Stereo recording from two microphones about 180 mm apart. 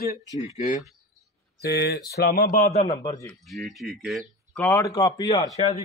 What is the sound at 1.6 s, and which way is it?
Speech, 65° left (ahead or behind).